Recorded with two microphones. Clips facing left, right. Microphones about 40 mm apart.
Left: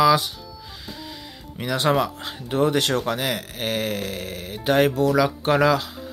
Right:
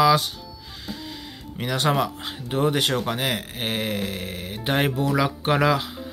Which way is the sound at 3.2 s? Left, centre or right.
Right.